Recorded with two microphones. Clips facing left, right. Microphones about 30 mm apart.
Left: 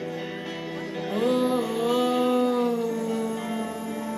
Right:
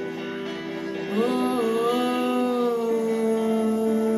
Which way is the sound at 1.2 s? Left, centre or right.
Centre.